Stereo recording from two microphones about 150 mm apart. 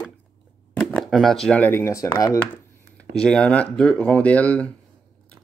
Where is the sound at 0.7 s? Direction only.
5° left (ahead or behind); by 2.3 s 25° left (ahead or behind).